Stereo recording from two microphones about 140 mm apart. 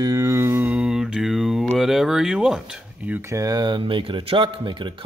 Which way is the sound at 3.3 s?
25° right (ahead or behind).